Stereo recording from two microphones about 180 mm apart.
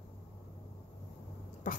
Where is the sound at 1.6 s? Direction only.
45° left (ahead or behind).